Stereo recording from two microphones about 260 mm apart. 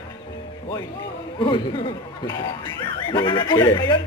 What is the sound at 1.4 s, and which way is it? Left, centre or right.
A man's voice, centre.